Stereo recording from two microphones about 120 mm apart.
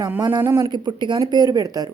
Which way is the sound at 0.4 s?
25° right (ahead or behind).